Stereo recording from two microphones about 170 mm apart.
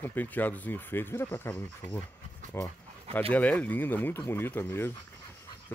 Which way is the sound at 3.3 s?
10° left (ahead or behind).